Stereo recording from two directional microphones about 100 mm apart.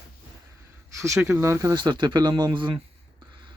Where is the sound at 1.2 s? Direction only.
30° right (ahead or behind).